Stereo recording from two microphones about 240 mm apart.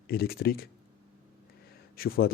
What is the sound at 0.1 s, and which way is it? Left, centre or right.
Speech, left.